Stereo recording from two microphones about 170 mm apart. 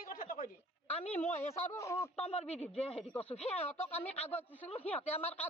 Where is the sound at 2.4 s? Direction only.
40° left (ahead or behind).